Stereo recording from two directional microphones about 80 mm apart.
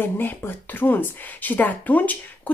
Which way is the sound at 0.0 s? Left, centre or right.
Left.